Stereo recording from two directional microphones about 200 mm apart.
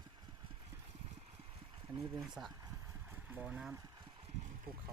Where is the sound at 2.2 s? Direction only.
Centre (ahead or behind).